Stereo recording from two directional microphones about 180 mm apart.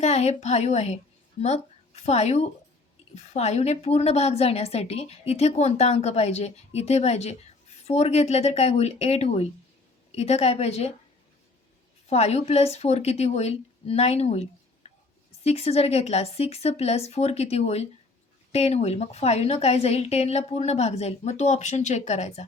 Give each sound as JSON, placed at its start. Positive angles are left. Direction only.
{"t": 0.0, "sound": "a woman's voice", "side_deg": 35}
{"t": 12.0, "sound": "a woman's voice", "side_deg": 35}
{"t": 14.8, "sound": "a sound", "side_deg": 35}
{"t": 15.4, "sound": "a woman's voice", "side_deg": 35}